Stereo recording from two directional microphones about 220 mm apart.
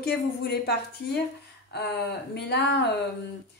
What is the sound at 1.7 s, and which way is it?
A woman's voice, 50° left (ahead or behind).